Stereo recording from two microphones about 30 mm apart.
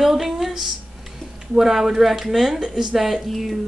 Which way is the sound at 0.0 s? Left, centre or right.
Centre.